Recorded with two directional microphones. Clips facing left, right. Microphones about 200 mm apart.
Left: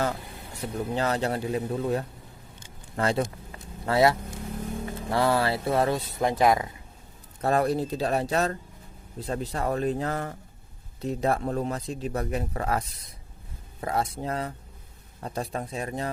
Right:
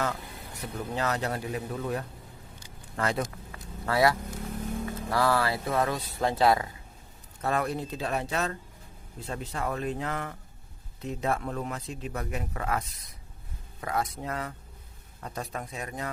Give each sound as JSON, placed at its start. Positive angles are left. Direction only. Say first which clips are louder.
{"t": 0.6, "sound": "speech", "louder": "left 4 dB", "side_deg": 25}
{"t": 2.6, "sound": "vehicle", "louder": "left 3 dB", "side_deg": 25}
{"t": 4.9, "sound": "speech", "louder": "left 2 dB", "side_deg": 25}
{"t": 7.4, "sound": "speech", "louder": "left 5 dB", "side_deg": 35}
{"t": 13.8, "sound": "speech", "louder": "left 3 dB", "side_deg": 30}